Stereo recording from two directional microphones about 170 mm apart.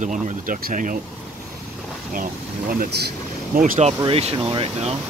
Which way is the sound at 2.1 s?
55° right (ahead or behind).